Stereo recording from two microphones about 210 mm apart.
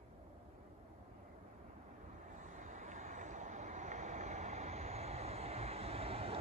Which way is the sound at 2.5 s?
35° right (ahead or behind).